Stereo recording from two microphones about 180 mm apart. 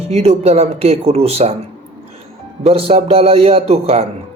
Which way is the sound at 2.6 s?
30° right (ahead or behind).